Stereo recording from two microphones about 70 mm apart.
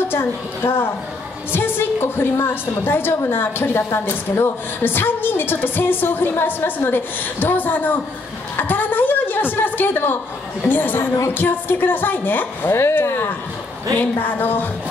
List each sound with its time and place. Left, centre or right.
0.1 s a woman's voice: left
8.5 s a sound: left
10.7 s a woman's voice: left